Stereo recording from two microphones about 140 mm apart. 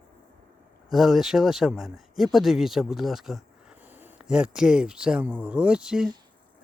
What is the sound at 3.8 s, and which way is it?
Speech, 15° right (ahead or behind).